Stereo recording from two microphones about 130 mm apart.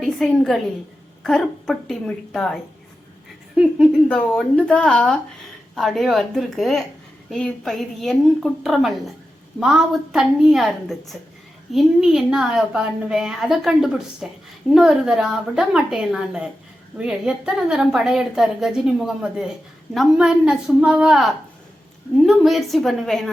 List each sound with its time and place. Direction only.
0.0 s a woman's voice: centre (ahead or behind)
4.1 s a woman's voice: 10° left (ahead or behind)